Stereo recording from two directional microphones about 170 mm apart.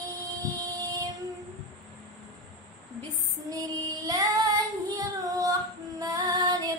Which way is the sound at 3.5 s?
20° right (ahead or behind).